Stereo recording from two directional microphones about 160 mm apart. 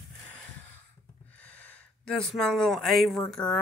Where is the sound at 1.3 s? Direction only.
10° left (ahead or behind).